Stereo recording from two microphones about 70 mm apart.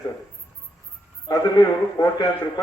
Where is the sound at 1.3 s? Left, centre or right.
Left.